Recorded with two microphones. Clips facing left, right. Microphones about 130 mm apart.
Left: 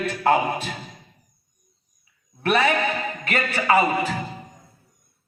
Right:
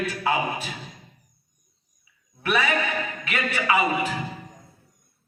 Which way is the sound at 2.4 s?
50° left (ahead or behind).